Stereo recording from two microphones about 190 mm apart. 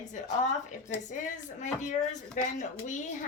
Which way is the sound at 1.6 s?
40° left (ahead or behind).